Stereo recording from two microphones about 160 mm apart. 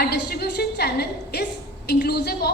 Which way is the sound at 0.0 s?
80° left.